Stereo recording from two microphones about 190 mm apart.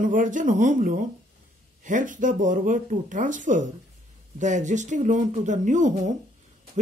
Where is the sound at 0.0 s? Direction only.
40° right (ahead or behind).